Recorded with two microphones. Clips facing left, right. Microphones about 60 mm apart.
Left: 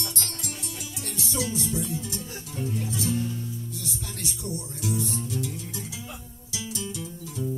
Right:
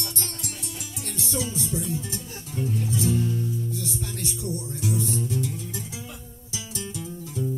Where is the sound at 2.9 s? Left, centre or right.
Right.